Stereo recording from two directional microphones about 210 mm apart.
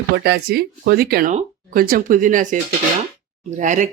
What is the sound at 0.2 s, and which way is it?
Speech, 50° right (ahead or behind).